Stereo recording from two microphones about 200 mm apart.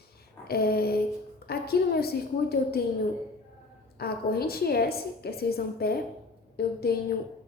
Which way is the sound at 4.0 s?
50° left (ahead or behind).